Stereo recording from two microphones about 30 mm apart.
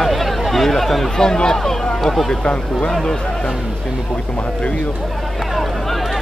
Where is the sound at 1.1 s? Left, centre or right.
Left.